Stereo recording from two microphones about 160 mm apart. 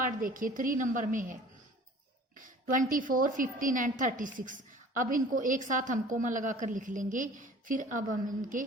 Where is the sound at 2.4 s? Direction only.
55° right (ahead or behind).